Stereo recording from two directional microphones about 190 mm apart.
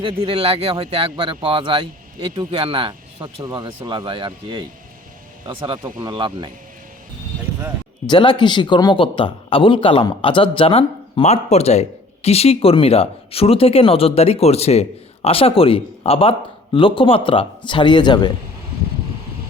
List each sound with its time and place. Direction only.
0.0 s speech: 25° right (ahead or behind)
8.0 s speech: 25° left (ahead or behind)